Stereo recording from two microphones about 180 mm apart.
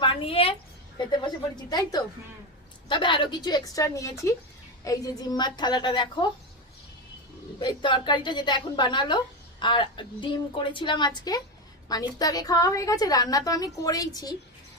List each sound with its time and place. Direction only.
0.0 s a sound: 30° left (ahead or behind)
1.7 s a woman's voice: 25° left (ahead or behind)
7.6 s a woman's voice: 25° left (ahead or behind)